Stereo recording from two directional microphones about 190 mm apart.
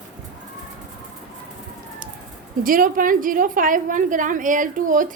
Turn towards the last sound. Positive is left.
turn(degrees=-45)  # may be behind; listen again after turning